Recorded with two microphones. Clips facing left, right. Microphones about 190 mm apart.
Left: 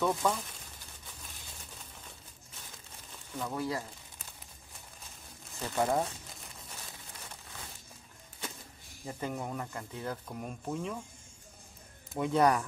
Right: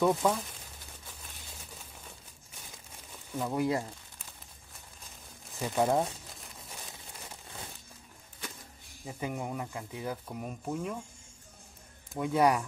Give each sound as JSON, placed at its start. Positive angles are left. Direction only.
{"t": 0.0, "sound": "speech", "side_deg": -10}
{"t": 3.3, "sound": "speech", "side_deg": -15}
{"t": 5.6, "sound": "speech", "side_deg": -10}
{"t": 9.0, "sound": "speech", "side_deg": -10}
{"t": 12.1, "sound": "speech", "side_deg": -5}